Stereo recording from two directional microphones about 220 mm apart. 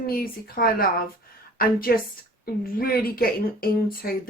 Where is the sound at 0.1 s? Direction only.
40° left (ahead or behind).